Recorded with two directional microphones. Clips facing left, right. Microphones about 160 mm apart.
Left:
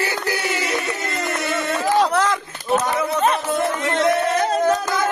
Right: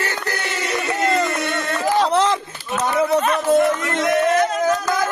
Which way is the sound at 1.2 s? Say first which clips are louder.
Right 1 dB; centre (ahead or behind).